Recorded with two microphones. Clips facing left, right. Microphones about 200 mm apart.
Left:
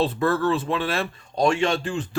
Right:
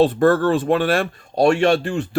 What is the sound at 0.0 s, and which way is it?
Speech, 50° right (ahead or behind).